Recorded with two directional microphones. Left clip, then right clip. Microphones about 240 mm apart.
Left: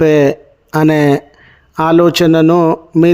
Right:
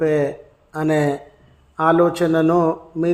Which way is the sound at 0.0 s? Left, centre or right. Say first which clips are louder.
Left 9 dB; left.